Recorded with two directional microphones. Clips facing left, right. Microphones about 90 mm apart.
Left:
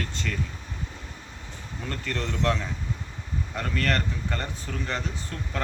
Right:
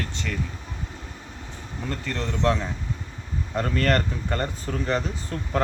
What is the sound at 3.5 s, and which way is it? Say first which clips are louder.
Speech: right 5 dB; 35° right (ahead or behind).